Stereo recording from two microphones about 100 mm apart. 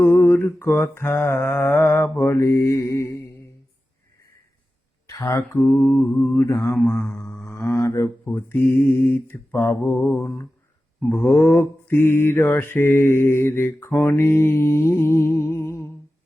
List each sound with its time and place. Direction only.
0.0 s mantra: 10° left (ahead or behind)
0.4 s mantra: 20° left (ahead or behind)
5.1 s a sound: 35° left (ahead or behind)
5.6 s mantra: 20° left (ahead or behind)
6.8 s a sound: 20° left (ahead or behind)
8.3 s mantra: 20° left (ahead or behind)